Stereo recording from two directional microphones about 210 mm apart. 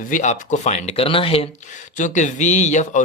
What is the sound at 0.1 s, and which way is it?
Speech, 35° left (ahead or behind).